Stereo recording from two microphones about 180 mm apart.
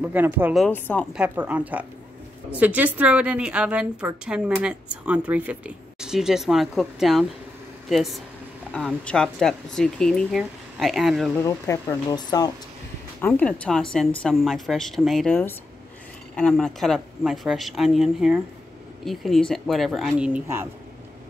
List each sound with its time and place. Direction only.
0.0 s a woman's voice: 10° right (ahead or behind)
0.6 s speech: 10° left (ahead or behind)
1.1 s a woman's voice: 10° right (ahead or behind)
11.4 s speech: 15° left (ahead or behind)
13.2 s speech: 5° left (ahead or behind)
16.3 s speech: 5° left (ahead or behind)